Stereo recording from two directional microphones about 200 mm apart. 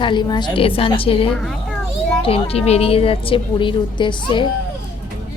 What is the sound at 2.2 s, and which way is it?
A woman's voice, 30° left (ahead or behind).